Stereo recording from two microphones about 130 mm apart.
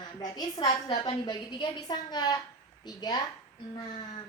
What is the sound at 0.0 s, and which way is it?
A woman's voice, 35° left (ahead or behind).